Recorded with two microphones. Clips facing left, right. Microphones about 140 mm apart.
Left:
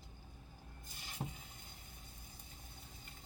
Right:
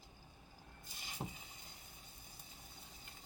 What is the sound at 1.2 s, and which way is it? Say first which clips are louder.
Frying: left 1 dB; 10° right (ahead or behind).